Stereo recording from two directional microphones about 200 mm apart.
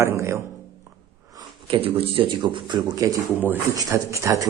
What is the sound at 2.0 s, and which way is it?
Speech, 30° right (ahead or behind).